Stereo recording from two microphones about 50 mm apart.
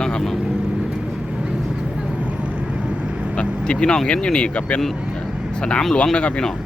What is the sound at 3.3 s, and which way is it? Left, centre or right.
Speech, left.